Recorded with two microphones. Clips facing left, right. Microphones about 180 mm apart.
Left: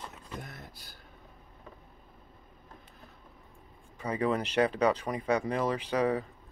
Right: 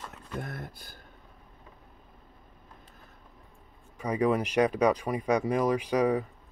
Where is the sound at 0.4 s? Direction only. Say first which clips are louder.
Right 7 dB; 50° right (ahead or behind).